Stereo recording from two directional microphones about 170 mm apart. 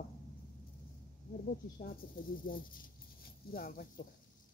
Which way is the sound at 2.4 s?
55° left (ahead or behind).